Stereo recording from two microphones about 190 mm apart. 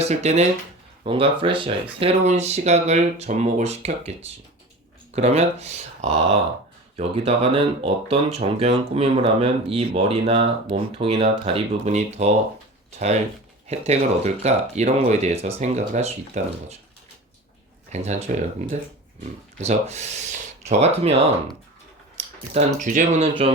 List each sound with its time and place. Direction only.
0.0 s speech: 35° right (ahead or behind)
13.7 s speech: 35° right (ahead or behind)
17.9 s speech: 35° right (ahead or behind)
19.5 s speech: 35° right (ahead or behind)
22.5 s speech: 40° right (ahead or behind)